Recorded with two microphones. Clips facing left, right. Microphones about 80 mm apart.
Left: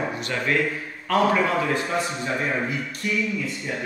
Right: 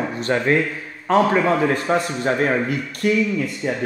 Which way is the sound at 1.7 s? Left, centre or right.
Right.